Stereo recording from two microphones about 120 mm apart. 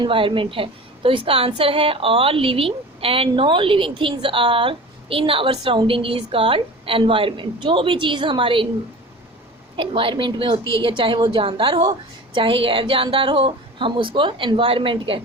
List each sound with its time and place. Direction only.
0.0 s a woman's voice: 45° right (ahead or behind)
9.7 s a woman's voice: 45° right (ahead or behind)